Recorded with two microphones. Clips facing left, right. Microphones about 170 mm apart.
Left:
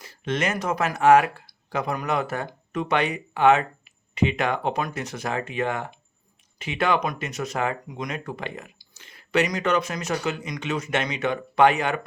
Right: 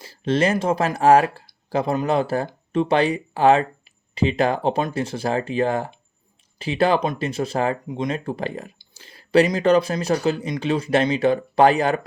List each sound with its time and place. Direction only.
0.0 s speech: 30° right (ahead or behind)